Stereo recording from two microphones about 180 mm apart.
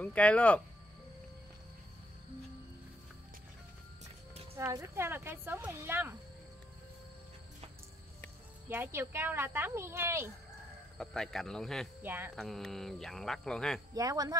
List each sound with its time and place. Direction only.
0.0 s speech: 5° left (ahead or behind)
4.6 s speech: 15° right (ahead or behind)
8.6 s speech: 10° right (ahead or behind)
11.0 s speech: 5° left (ahead or behind)
12.0 s speech: 10° right (ahead or behind)
12.4 s speech: centre (ahead or behind)
13.9 s speech: 20° right (ahead or behind)